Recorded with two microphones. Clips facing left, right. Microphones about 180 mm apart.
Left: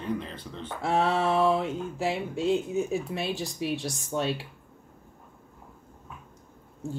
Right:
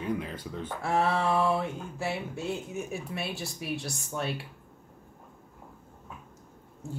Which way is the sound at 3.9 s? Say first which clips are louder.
Left 5 dB; 20° left (ahead or behind).